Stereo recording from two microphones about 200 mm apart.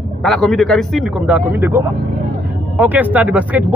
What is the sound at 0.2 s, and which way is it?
A man's voice, centre (ahead or behind).